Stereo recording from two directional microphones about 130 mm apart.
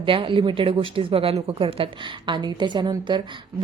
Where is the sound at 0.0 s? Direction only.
40° right (ahead or behind).